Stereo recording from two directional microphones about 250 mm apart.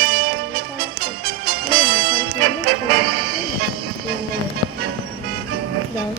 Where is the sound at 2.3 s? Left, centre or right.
Right.